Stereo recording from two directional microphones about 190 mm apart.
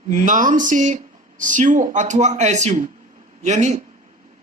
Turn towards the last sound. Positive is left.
turn(degrees=-35)  # may be behind; listen again after turning